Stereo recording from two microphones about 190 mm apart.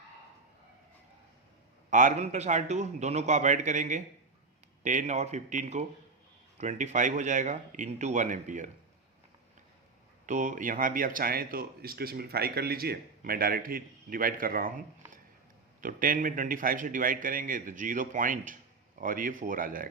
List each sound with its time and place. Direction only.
1.9 s a man's voice: 40° right (ahead or behind)
10.2 s speech: 40° right (ahead or behind)